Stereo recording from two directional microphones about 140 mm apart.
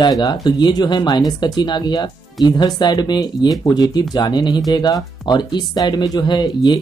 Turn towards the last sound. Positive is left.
turn(degrees=30)  # may be behind; listen again after turning